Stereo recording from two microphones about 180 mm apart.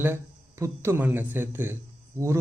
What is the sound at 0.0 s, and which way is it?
Speech, 15° right (ahead or behind).